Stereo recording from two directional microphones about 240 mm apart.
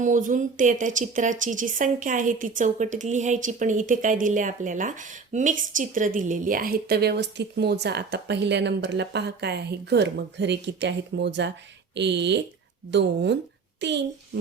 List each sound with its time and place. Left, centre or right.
0.0 s a woman's voice: right